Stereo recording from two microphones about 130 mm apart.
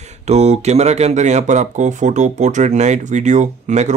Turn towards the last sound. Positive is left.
turn(degrees=-65)  # may be behind; listen again after turning